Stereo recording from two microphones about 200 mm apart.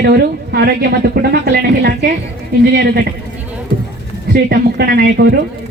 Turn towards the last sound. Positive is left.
turn(degrees=-50)  # may be behind; listen again after turning